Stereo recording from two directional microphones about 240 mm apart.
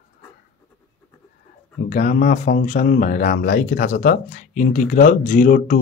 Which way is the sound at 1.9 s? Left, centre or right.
Left.